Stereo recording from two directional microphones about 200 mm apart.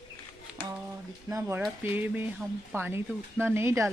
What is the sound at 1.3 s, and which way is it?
Speech, 10° right (ahead or behind).